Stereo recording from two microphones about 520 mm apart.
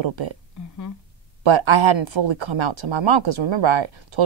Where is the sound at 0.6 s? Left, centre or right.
Left.